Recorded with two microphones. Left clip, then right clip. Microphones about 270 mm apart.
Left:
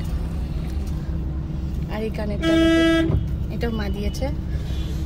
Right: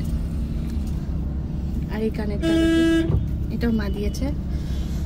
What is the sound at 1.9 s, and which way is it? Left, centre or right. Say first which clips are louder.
Speech: right 1 dB; centre.